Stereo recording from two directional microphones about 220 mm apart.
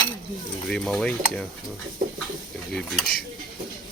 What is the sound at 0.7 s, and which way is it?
Stir, centre (ahead or behind).